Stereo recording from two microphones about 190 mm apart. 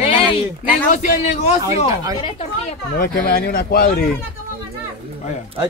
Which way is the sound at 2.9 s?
50° left (ahead or behind).